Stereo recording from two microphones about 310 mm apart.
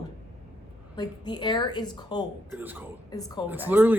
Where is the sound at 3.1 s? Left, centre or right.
Centre.